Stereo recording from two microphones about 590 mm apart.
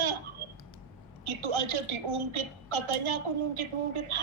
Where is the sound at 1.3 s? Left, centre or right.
Right.